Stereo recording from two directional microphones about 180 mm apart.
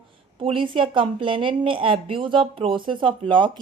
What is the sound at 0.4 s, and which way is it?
A woman's voice, 30° right (ahead or behind).